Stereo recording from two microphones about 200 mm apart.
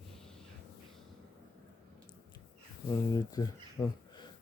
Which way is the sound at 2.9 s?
20° left (ahead or behind).